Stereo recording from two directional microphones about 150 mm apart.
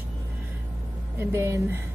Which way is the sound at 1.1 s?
15° right (ahead or behind).